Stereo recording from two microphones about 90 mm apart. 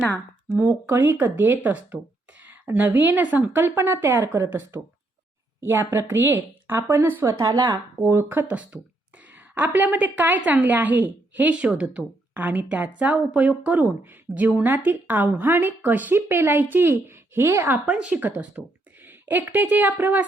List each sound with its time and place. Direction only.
0.5 s a woman's voice: 15° right (ahead or behind)
7.3 s speech: 40° right (ahead or behind)
8.1 s a woman's voice: 25° right (ahead or behind)
17.8 s a woman's voice: 10° right (ahead or behind)